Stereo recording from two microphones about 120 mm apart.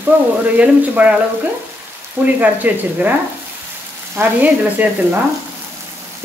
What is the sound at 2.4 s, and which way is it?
Speech, 15° right (ahead or behind).